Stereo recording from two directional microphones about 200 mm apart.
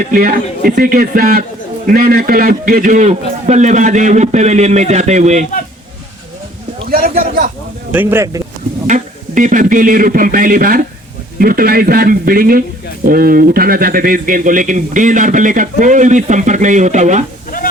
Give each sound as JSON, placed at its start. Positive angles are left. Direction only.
{"t": 0.0, "sound": "speech", "side_deg": -45}
{"t": 7.2, "sound": "speech", "side_deg": -45}
{"t": 7.9, "sound": "speech", "side_deg": -10}
{"t": 8.9, "sound": "speech", "side_deg": -40}
{"t": 17.5, "sound": "a sound", "side_deg": 45}